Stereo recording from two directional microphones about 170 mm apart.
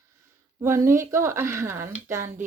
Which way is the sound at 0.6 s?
15° right (ahead or behind).